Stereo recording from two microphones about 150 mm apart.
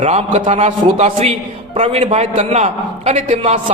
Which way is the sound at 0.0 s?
45° right (ahead or behind).